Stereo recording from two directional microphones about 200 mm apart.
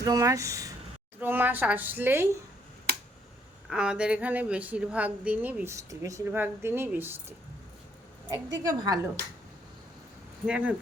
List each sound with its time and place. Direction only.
0.0 s a woman's voice: 15° right (ahead or behind)
3.7 s a woman's voice: 5° right (ahead or behind)
8.6 s speech: 20° right (ahead or behind)
10.4 s a woman's voice: 5° right (ahead or behind)